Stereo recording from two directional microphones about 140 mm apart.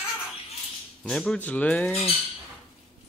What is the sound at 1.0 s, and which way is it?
Speech, 5° left (ahead or behind).